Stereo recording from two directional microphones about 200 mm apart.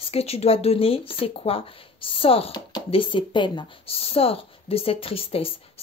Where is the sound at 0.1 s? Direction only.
30° left (ahead or behind).